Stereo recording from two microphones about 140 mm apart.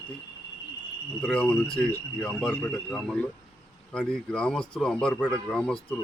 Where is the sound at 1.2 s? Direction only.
5° left (ahead or behind).